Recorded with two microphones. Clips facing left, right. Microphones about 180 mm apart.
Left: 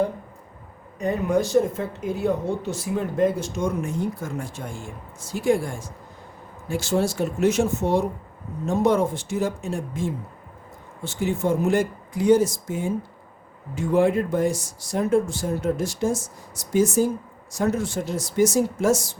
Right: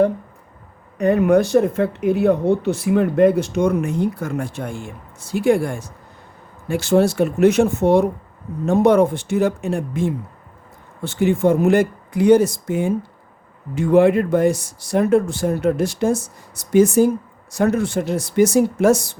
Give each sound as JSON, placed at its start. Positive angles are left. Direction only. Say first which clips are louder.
{"t": 0.9, "sound": "speech", "louder": "right 8 dB", "side_deg": -65}